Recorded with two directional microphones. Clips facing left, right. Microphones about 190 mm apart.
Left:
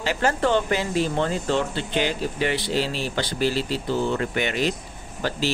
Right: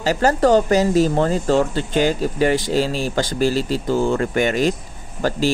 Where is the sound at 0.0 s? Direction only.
40° right (ahead or behind).